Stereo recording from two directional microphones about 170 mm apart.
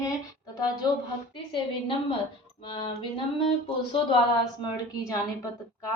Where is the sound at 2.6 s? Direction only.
30° left (ahead or behind).